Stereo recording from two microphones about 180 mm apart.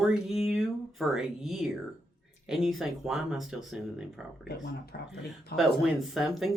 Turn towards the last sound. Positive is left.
turn(degrees=0)  # may be behind; listen again after turning